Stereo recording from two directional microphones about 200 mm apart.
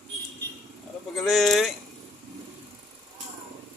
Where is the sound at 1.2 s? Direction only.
Centre (ahead or behind).